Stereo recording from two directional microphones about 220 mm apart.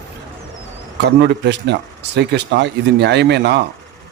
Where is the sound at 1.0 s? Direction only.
50° right (ahead or behind).